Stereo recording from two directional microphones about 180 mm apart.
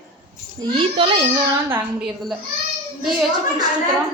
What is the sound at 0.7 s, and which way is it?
Speech, 30° right (ahead or behind).